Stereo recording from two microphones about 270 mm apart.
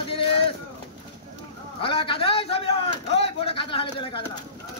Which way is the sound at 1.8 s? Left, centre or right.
Centre.